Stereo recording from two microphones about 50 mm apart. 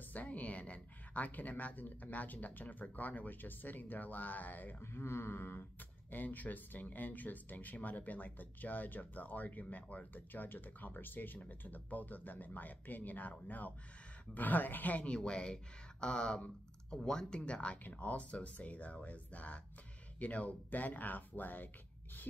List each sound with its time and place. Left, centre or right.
0.1 s speech: left
4.9 s speech: left
15.1 s speech: centre; by 21.6 s left